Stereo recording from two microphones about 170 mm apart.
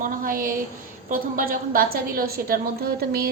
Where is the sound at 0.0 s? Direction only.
55° right (ahead or behind).